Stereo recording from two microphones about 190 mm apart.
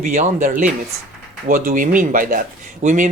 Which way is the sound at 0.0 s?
45° right (ahead or behind).